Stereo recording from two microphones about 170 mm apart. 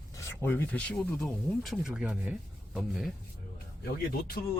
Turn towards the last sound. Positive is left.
turn(degrees=65)  # may be behind; listen again after turning